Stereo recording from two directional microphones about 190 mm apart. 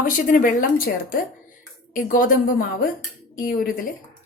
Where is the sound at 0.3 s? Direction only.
45° left (ahead or behind).